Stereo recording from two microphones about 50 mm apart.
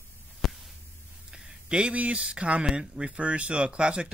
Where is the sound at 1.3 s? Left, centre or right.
Centre.